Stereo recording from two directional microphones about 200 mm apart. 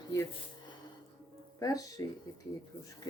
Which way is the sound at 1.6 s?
15° left (ahead or behind).